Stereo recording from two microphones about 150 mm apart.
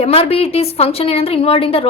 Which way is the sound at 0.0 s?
40° left (ahead or behind).